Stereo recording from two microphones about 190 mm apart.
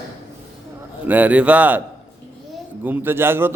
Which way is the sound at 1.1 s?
10° right (ahead or behind).